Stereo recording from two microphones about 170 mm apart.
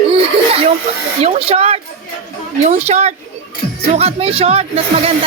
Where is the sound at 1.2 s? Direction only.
40° right (ahead or behind).